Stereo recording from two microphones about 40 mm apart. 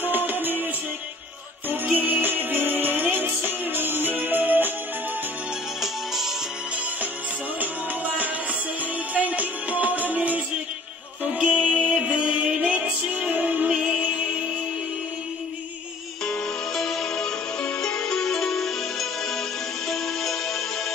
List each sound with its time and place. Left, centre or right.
0.0 s music: right
2.0 s music: right
5.8 s music: centre
7.6 s music: right
11.5 s music: right
13.1 s music: right
13.7 s music: right
16.7 s music: centre